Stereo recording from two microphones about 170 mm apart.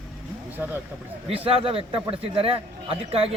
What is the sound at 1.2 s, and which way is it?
A man's voice, 35° right (ahead or behind).